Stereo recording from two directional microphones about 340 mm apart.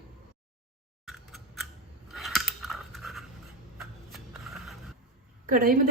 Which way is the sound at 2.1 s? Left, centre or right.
Centre.